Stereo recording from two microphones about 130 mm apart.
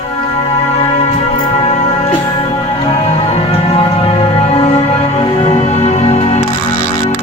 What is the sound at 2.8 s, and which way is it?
Music, 50° left (ahead or behind).